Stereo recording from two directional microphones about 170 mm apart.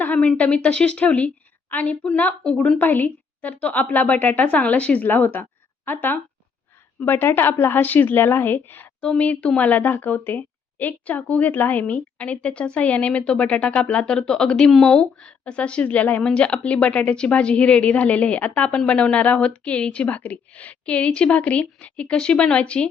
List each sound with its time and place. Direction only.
0.0 s a woman's voice: 10° left (ahead or behind)